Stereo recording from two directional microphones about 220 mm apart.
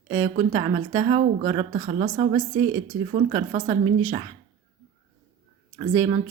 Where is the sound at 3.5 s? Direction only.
30° right (ahead or behind).